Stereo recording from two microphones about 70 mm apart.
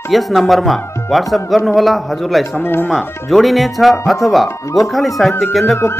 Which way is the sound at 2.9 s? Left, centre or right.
Centre.